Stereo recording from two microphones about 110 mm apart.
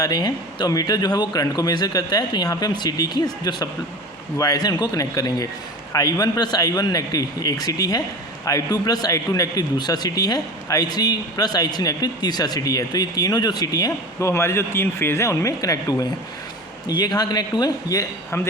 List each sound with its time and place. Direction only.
0.0 s a man's voice: 35° left (ahead or behind)
18.3 s a man's voice: 20° left (ahead or behind)